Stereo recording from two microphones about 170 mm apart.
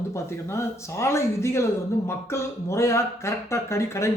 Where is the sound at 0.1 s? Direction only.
15° left (ahead or behind).